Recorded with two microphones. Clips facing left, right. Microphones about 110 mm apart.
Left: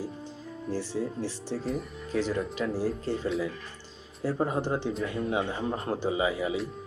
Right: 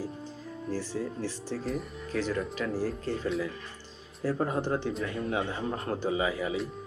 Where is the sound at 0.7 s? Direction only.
15° left (ahead or behind).